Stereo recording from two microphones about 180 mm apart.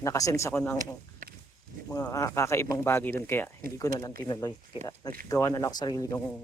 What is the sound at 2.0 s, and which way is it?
Speech, 15° left (ahead or behind).